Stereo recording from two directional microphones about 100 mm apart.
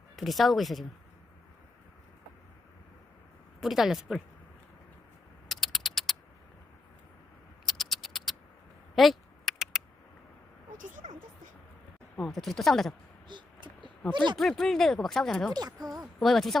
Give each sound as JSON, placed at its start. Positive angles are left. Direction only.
{"t": 0.2, "sound": "speech", "side_deg": 0}
{"t": 3.6, "sound": "speech", "side_deg": -5}
{"t": 5.5, "sound": "typing", "side_deg": 0}
{"t": 7.6, "sound": "typing", "side_deg": 0}
{"t": 9.0, "sound": "a sound", "side_deg": 0}
{"t": 12.2, "sound": "speech", "side_deg": 0}
{"t": 13.2, "sound": "vehicle", "side_deg": -50}
{"t": 14.3, "sound": "speech", "side_deg": 0}
{"t": 15.5, "sound": "a woman's voice", "side_deg": -40}
{"t": 15.9, "sound": "speech", "side_deg": 0}